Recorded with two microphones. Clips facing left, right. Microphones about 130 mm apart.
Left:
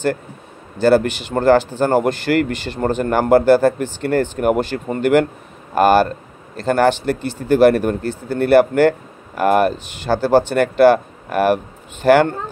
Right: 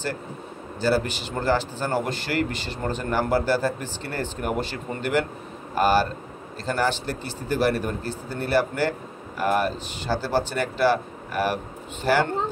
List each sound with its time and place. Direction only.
0.7 s speech: 60° left (ahead or behind)
5.8 s speech: 60° left (ahead or behind)